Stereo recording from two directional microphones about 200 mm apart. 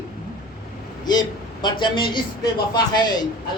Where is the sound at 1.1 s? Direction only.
20° left (ahead or behind).